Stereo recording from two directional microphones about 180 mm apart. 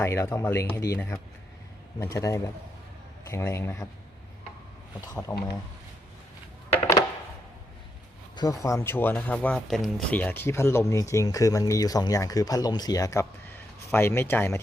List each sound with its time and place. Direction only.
0.0 s speech: 15° left (ahead or behind)
4.9 s speech: 20° left (ahead or behind)
8.4 s speech: 20° left (ahead or behind)